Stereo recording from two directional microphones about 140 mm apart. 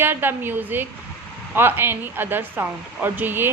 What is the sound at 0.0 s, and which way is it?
A woman's voice, 15° right (ahead or behind).